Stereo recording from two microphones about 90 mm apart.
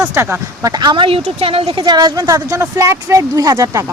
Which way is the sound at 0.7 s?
60° right (ahead or behind).